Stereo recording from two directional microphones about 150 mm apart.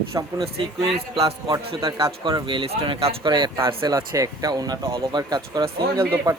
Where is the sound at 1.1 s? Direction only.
40° right (ahead or behind).